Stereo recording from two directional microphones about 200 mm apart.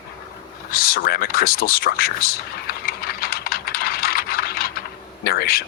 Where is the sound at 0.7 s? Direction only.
50° left (ahead or behind).